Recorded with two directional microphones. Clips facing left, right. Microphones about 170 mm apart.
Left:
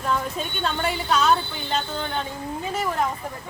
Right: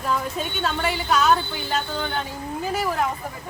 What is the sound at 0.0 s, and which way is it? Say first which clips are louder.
A woman's voice: even; centre (ahead or behind).